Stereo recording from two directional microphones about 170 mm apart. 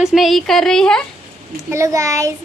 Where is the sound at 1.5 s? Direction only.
15° right (ahead or behind).